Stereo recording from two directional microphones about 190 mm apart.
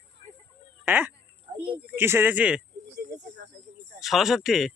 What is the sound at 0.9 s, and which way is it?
Speech, 10° right (ahead or behind).